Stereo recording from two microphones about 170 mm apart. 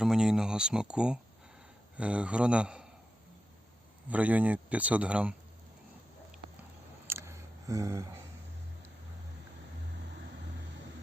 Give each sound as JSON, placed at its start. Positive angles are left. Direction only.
{"t": 0.0, "sound": "speech", "side_deg": -5}
{"t": 4.1, "sound": "speech", "side_deg": -10}
{"t": 7.1, "sound": "a sound", "side_deg": -15}